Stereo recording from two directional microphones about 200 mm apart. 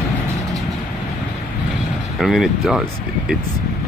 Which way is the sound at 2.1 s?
Centre (ahead or behind).